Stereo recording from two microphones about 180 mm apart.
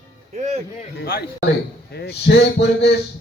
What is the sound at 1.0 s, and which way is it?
A man's voice, 60° left (ahead or behind).